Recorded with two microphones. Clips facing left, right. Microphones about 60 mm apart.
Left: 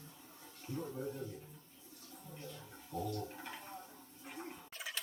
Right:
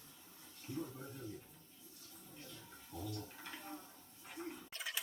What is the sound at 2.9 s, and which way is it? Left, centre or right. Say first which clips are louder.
Toilet flush: left 6 dB; left.